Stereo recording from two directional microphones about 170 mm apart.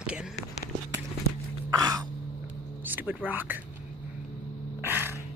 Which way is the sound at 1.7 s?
20° right (ahead or behind).